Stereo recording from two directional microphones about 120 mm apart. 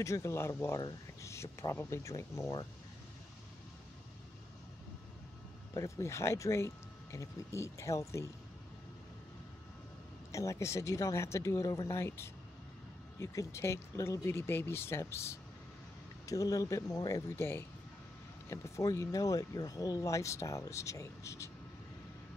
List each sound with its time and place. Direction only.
0.0 s speech: 25° left (ahead or behind)
5.8 s speech: 25° left (ahead or behind)
10.3 s speech: 25° left (ahead or behind)